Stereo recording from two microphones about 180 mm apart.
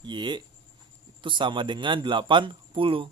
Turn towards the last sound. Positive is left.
turn(degrees=-30)  # may be behind; listen again after turning